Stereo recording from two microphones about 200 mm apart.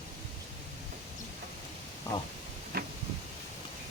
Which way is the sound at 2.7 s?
50° right (ahead or behind).